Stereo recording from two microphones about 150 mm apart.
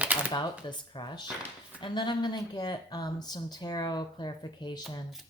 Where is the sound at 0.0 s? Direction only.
10° right (ahead or behind).